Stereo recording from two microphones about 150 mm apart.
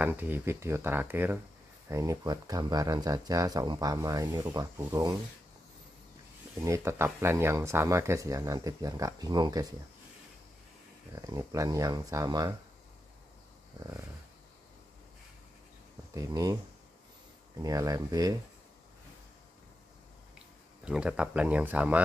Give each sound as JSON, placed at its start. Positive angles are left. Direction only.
{"t": 0.0, "sound": "speech", "side_deg": -10}
{"t": 6.6, "sound": "speech", "side_deg": -20}
{"t": 11.1, "sound": "speech", "side_deg": -25}
{"t": 16.1, "sound": "speech", "side_deg": -25}
{"t": 17.6, "sound": "speech", "side_deg": -25}
{"t": 20.8, "sound": "speech", "side_deg": -5}